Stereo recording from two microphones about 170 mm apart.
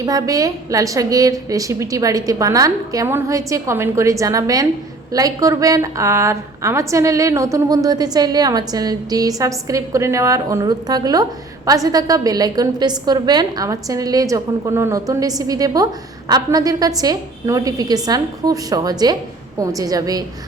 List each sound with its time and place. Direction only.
0.0 s a woman's voice: 20° right (ahead or behind)